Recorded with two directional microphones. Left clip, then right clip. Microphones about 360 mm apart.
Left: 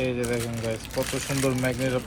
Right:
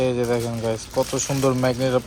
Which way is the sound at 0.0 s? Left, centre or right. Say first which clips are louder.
Right 6 dB; centre.